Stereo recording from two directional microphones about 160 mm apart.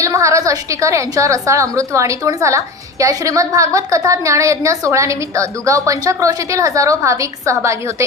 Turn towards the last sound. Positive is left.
turn(degrees=-20)  # may be behind; listen again after turning